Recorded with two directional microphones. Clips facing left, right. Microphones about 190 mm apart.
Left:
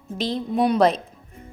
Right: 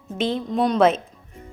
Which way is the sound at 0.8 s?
35° left (ahead or behind).